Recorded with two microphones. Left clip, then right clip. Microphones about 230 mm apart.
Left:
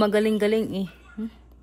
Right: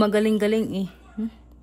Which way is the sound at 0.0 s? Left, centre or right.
Centre.